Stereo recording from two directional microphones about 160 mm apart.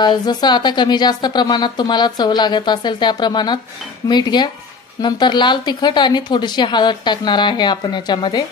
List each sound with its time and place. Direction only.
0.0 s speech: 25° left (ahead or behind)